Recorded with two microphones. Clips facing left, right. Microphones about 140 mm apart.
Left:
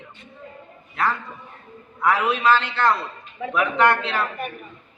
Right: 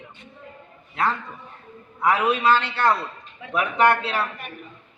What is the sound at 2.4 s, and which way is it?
Speech, 15° right (ahead or behind).